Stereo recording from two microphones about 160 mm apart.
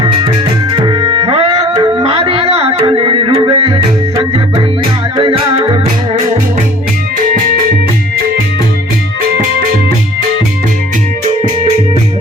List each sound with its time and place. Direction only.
0.7 s tabla: 30° right (ahead or behind)
1.6 s music: 25° right (ahead or behind)